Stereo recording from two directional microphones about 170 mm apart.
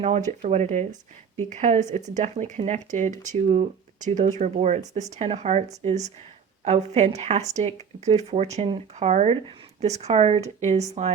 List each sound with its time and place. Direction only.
0.0 s speech: 45° right (ahead or behind)